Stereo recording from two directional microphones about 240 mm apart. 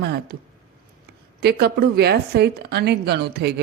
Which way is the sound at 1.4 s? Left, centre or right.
Right.